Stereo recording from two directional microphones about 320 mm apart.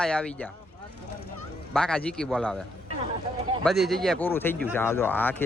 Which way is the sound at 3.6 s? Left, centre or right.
Centre.